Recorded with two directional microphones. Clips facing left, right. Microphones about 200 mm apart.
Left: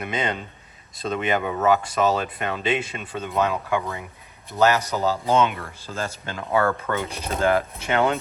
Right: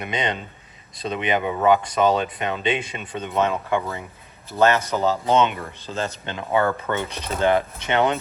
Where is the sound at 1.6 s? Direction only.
5° left (ahead or behind).